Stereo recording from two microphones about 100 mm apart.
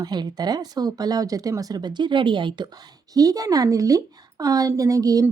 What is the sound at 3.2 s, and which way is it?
Speech, 35° right (ahead or behind).